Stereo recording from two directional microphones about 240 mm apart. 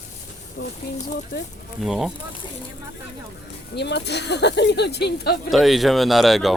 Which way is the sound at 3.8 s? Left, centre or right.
Left.